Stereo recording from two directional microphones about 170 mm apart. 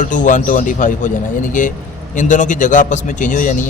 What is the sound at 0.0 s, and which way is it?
A man's voice, 50° left (ahead or behind).